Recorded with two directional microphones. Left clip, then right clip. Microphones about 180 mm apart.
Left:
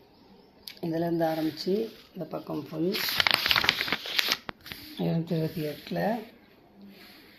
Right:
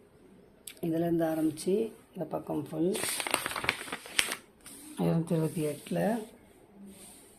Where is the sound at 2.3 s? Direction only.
5° right (ahead or behind).